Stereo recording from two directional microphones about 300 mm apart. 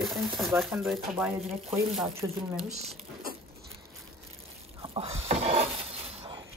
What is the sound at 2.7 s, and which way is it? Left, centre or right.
Speech, right.